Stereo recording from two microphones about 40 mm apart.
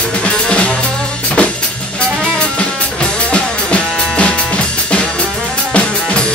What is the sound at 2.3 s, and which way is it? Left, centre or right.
Music, left.